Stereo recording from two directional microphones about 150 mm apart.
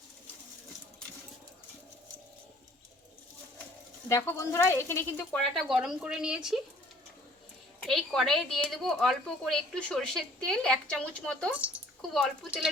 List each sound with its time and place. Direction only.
4.1 s speech: 20° left (ahead or behind)
5.4 s a woman's voice: centre (ahead or behind)
7.8 s a woman's voice: centre (ahead or behind)
11.5 s drip: 10° right (ahead or behind)
12.1 s a woman's voice: centre (ahead or behind)